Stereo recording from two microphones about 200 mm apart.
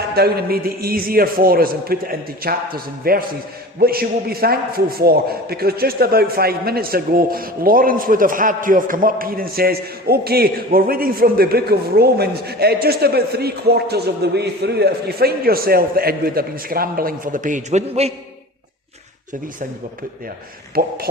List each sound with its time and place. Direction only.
0.1 s a man's voice: 50° right (ahead or behind); by 18.1 s 35° right (ahead or behind)
20.8 s a man's voice: 50° right (ahead or behind)